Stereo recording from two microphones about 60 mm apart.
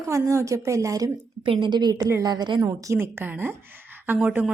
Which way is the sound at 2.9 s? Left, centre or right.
Right.